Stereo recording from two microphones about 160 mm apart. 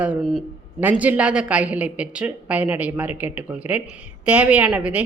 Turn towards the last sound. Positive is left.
turn(degrees=-10)  # may be behind; listen again after turning